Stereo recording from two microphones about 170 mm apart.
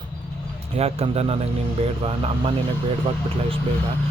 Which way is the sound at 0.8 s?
35° right (ahead or behind).